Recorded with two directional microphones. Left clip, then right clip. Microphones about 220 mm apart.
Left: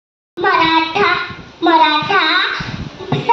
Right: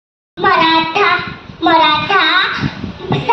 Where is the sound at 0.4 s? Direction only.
50° right (ahead or behind).